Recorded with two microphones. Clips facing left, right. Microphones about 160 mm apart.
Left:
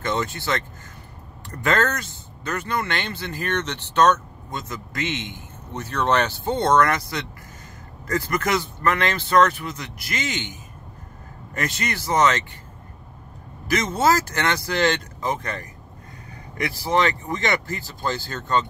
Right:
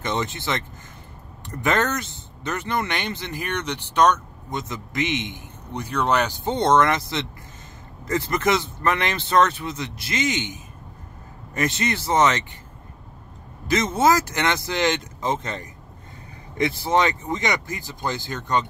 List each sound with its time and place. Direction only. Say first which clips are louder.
0.0 s speech: left 1 dB; 20° right (ahead or behind)
13.7 s speech: right 1 dB; 20° right (ahead or behind)